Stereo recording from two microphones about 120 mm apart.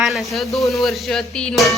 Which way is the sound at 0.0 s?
Centre (ahead or behind).